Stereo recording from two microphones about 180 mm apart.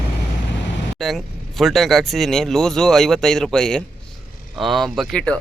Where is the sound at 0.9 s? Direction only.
Centre (ahead or behind).